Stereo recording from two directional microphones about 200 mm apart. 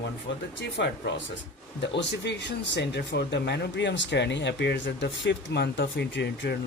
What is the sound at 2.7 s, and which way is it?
Speech, 60° left (ahead or behind).